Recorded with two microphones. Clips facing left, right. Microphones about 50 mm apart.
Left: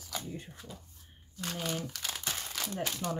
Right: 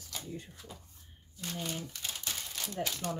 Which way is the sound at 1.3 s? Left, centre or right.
Left.